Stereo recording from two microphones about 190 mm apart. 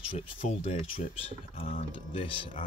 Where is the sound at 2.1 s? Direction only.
30° left (ahead or behind).